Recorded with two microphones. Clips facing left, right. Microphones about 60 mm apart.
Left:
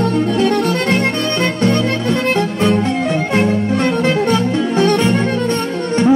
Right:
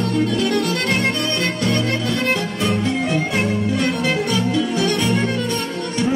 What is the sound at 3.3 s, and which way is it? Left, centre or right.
Music, left.